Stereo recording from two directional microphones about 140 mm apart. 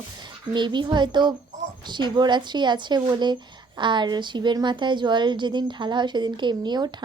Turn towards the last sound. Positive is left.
turn(degrees=-30)  # may be behind; listen again after turning